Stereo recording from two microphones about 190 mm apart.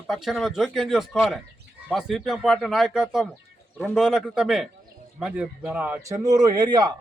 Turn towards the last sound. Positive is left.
turn(degrees=-20)  # may be behind; listen again after turning